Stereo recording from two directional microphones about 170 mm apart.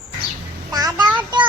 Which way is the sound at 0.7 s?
20° right (ahead or behind).